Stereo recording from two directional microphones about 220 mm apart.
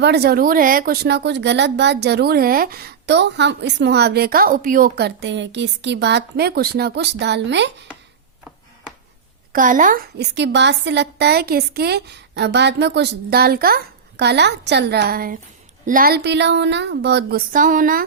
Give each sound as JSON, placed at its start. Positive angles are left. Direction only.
{"t": 0.0, "sound": "speech", "side_deg": -50}
{"t": 9.5, "sound": "speech", "side_deg": -35}